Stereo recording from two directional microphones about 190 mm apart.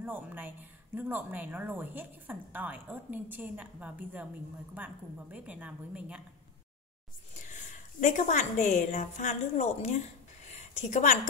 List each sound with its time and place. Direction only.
0.0 s speech: 10° right (ahead or behind)
7.3 s a woman's voice: 40° left (ahead or behind)